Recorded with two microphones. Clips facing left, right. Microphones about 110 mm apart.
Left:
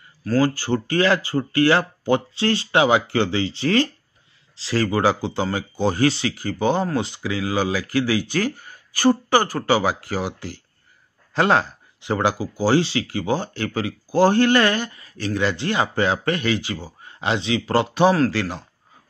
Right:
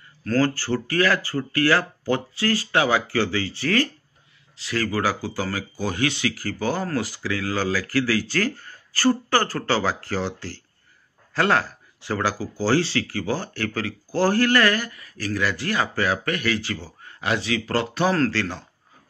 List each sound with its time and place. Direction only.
0.2 s speech: 10° left (ahead or behind)